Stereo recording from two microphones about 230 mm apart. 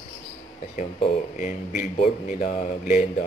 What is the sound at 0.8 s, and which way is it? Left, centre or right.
A man's voice, left.